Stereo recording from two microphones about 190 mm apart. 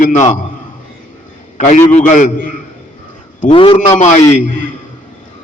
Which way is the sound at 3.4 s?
25° left (ahead or behind).